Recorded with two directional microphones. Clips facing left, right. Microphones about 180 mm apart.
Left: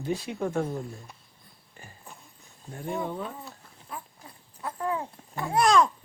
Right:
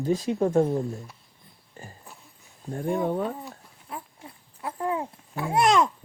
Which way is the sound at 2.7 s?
50° right (ahead or behind).